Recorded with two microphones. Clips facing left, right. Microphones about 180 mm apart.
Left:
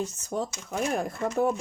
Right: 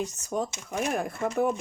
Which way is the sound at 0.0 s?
15° right (ahead or behind).